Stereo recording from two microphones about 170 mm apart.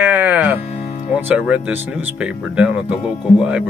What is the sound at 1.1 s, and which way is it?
Speech, 10° right (ahead or behind).